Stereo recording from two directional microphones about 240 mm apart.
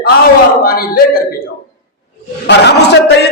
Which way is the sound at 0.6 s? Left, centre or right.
Left.